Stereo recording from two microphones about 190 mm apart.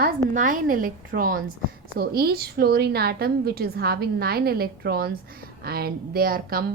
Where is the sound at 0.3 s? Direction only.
45° right (ahead or behind).